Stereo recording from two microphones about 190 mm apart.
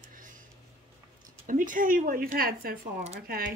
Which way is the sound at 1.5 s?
45° right (ahead or behind).